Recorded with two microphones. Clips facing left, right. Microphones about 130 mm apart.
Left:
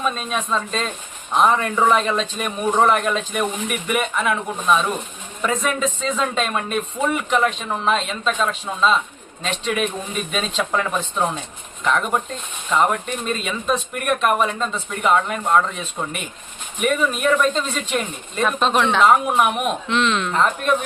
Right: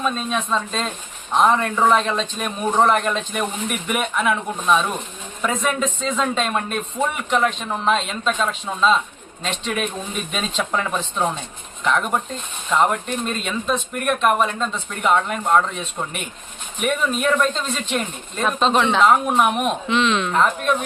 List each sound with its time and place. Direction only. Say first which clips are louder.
0.0 s speech: right 1 dB; 5° left (ahead or behind)